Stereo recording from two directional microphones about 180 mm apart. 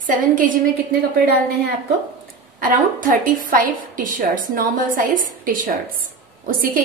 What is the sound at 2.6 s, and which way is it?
A woman's voice, 50° right (ahead or behind).